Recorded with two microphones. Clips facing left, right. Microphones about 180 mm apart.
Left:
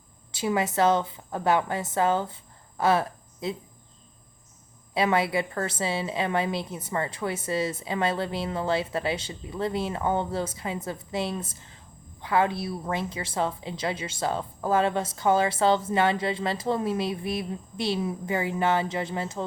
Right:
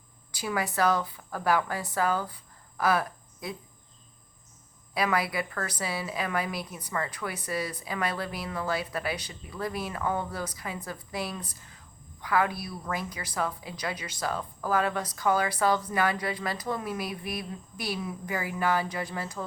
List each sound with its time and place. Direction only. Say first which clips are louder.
0.3 s a woman's voice: left 5 dB; 25° left (ahead or behind)
4.9 s a woman's voice: left 4 dB; 25° left (ahead or behind)